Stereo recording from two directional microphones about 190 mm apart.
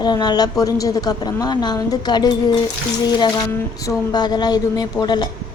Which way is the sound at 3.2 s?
15° left (ahead or behind).